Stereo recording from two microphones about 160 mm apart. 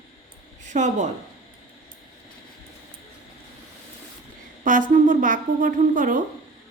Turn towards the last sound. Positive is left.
turn(degrees=-55)  # may be behind; listen again after turning